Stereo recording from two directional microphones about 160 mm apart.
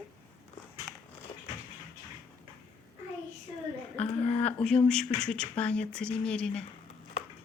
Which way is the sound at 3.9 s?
40° left (ahead or behind).